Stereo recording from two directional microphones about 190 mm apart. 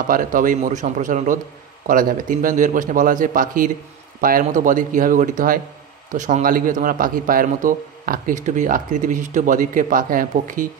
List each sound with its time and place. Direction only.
0.1 s a man's voice: 45° right (ahead or behind)